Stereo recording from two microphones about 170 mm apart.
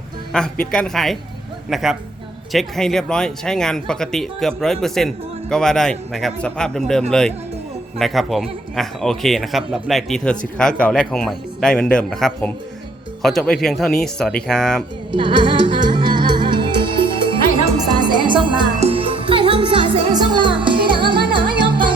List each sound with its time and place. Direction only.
0.3 s speech: 5° left (ahead or behind)
15.1 s music: 30° right (ahead or behind)